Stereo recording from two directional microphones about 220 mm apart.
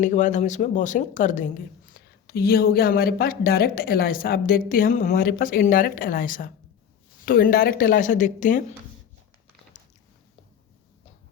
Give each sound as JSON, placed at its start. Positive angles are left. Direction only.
{"t": 0.0, "sound": "speech", "side_deg": 35}